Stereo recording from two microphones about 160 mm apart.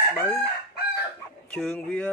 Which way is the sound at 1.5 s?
5° left (ahead or behind).